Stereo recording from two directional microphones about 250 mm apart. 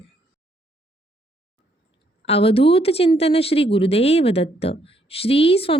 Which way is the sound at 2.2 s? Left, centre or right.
Left.